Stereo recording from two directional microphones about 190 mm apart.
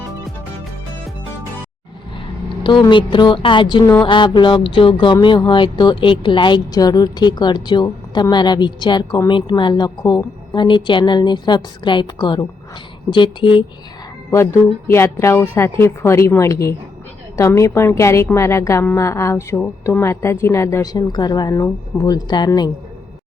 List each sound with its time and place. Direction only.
2.6 s speech: 25° left (ahead or behind)
14.3 s a woman's voice: 15° left (ahead or behind)